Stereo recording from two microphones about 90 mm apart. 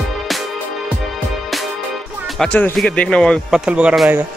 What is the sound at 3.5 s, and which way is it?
Speech, 10° right (ahead or behind).